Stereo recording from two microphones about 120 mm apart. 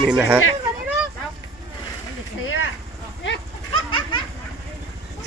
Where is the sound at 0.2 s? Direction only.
15° right (ahead or behind).